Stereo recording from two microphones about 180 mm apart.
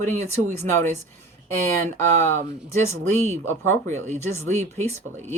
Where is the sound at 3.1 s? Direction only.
40° right (ahead or behind).